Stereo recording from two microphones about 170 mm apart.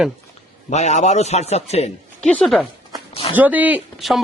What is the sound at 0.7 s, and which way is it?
A man's voice, 40° left (ahead or behind).